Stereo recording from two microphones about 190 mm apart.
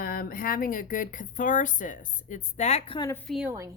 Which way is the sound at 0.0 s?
50° left (ahead or behind).